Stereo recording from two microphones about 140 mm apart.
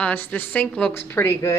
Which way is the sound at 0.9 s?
20° left (ahead or behind).